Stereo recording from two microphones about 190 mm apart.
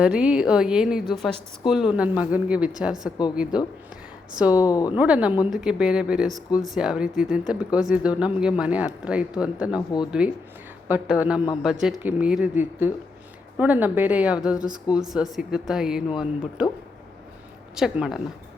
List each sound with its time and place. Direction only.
0.0 s a woman's voice: 5° right (ahead or behind)
4.6 s speech: 20° left (ahead or behind)
4.9 s a woman's voice: 5° right (ahead or behind)
17.7 s speech: 5° right (ahead or behind)